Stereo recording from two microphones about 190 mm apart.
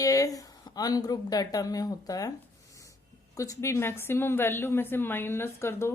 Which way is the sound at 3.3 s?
15° left (ahead or behind).